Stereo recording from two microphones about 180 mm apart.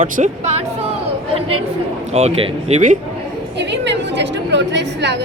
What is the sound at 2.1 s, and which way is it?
Speech, 35° right (ahead or behind).